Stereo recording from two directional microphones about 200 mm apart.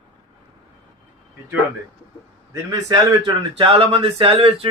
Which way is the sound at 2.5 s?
15° right (ahead or behind).